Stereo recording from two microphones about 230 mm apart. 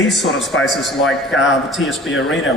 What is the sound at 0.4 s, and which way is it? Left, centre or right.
A man's voice, centre.